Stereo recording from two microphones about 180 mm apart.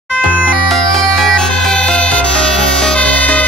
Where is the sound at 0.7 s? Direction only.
Centre (ahead or behind).